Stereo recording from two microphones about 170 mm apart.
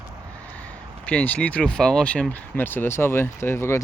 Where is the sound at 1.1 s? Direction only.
10° left (ahead or behind).